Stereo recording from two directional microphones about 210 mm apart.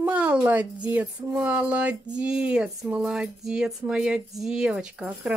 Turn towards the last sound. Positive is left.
turn(degrees=-5)  # may be behind; listen again after turning